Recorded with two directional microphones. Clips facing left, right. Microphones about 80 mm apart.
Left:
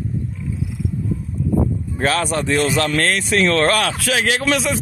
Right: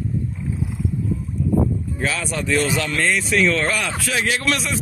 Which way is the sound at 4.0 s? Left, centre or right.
Left.